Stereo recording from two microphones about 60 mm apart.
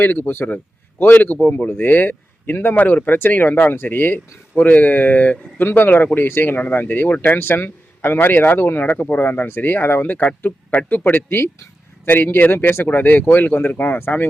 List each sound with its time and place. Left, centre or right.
0.0 s speech: left
11.3 s speech: left